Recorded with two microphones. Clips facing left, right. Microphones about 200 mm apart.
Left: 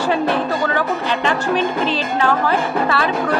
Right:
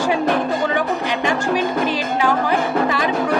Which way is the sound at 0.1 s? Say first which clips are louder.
Left 1 dB; 15° right (ahead or behind).